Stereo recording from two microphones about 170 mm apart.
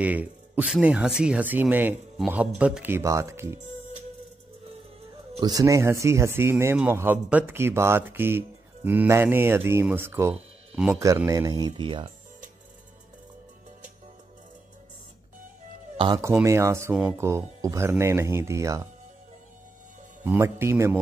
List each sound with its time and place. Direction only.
0.0 s speech: 10° right (ahead or behind)
5.4 s speech: 20° right (ahead or behind)
10.7 s speech: 5° right (ahead or behind)
11.0 s speech: 15° right (ahead or behind)
16.2 s speech: 15° right (ahead or behind)
20.2 s speech: 15° right (ahead or behind)